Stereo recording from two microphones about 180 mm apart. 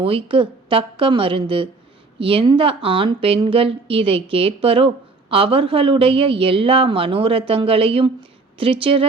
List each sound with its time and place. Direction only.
0.0 s a woman's voice: 30° right (ahead or behind)